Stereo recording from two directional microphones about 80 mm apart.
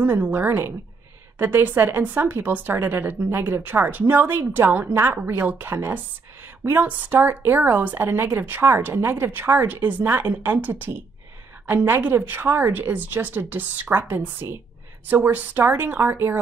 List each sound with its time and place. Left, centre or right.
0.0 s a woman's voice: right